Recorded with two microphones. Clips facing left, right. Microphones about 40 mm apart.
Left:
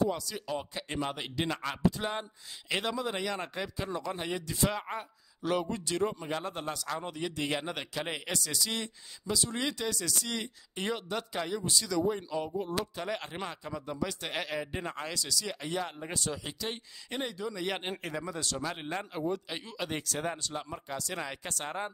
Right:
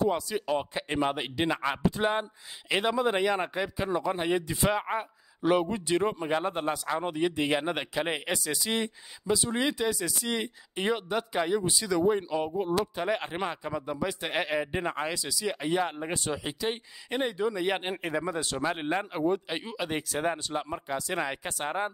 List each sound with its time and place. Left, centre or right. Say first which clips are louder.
0.0 s speech: right 4 dB; right